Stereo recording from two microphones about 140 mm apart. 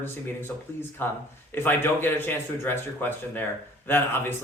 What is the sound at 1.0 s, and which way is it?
Speech, 15° left (ahead or behind).